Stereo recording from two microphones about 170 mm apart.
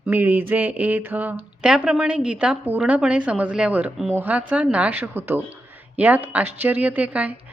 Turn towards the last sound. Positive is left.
turn(degrees=-10)  # may be behind; listen again after turning